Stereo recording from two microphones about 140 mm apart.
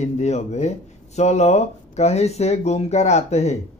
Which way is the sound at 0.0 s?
55° left (ahead or behind).